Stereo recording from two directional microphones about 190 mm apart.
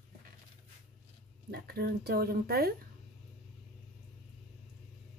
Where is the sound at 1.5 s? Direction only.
55° right (ahead or behind).